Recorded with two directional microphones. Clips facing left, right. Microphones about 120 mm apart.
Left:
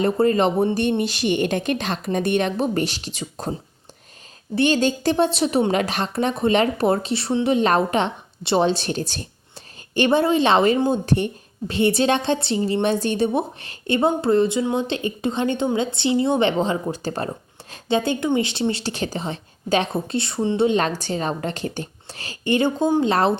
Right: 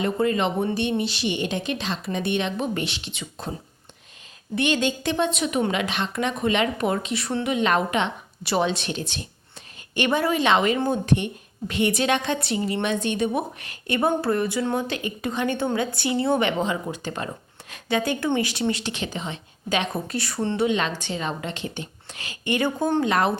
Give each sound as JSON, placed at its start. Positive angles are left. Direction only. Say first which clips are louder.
{"t": 0.0, "sound": "a woman's voice", "louder": "left 5 dB", "side_deg": 40}
{"t": 4.5, "sound": "a woman's voice", "louder": "left 4 dB", "side_deg": 35}
{"t": 20.6, "sound": "a woman's voice", "louder": "left 4 dB", "side_deg": 35}